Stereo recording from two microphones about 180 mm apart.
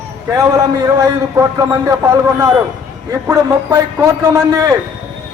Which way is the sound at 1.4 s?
15° right (ahead or behind).